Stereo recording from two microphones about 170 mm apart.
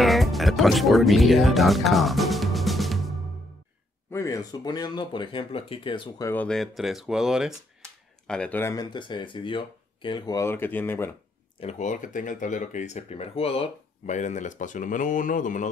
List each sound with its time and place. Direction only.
0.0 s speech: centre (ahead or behind)
4.1 s speech: 15° left (ahead or behind)
6.2 s speech: 10° left (ahead or behind)
8.3 s speech: 10° left (ahead or behind)
8.9 s speech: 25° left (ahead or behind); by 11.1 s 10° left (ahead or behind)
11.6 s speech: 45° left (ahead or behind)